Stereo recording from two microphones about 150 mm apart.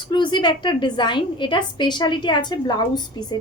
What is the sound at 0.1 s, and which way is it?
A woman's voice, 30° left (ahead or behind).